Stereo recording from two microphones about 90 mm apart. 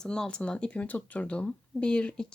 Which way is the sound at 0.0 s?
5° left (ahead or behind).